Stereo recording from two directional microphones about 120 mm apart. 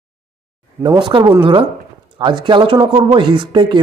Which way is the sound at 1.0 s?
40° right (ahead or behind).